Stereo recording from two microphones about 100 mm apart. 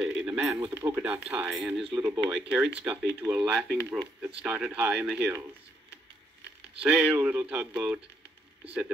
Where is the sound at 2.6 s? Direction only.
15° right (ahead or behind).